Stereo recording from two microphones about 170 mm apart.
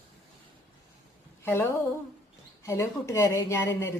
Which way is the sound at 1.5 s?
15° left (ahead or behind).